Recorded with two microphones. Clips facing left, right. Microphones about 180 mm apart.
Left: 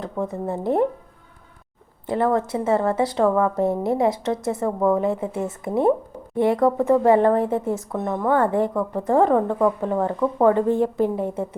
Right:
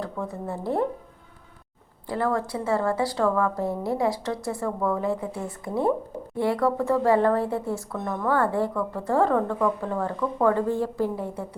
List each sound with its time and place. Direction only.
0.0 s speech: 20° left (ahead or behind)
2.0 s speech: 20° left (ahead or behind)